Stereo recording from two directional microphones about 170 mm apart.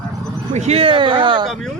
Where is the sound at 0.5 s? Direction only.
40° right (ahead or behind).